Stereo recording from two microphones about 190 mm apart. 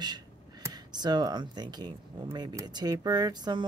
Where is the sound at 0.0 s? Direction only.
20° right (ahead or behind).